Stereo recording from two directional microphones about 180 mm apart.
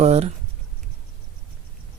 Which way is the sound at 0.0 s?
35° right (ahead or behind).